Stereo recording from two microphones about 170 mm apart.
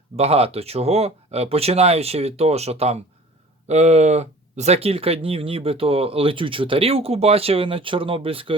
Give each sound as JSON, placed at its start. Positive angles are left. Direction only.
{"t": 0.2, "sound": "speech", "side_deg": -35}